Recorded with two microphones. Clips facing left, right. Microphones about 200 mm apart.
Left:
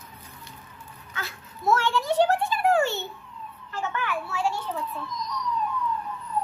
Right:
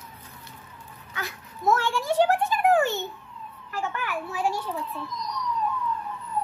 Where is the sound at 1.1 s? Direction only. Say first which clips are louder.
Right 2 dB; 15° right (ahead or behind).